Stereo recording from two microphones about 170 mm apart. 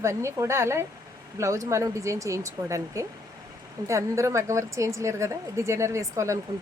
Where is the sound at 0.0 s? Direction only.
15° right (ahead or behind).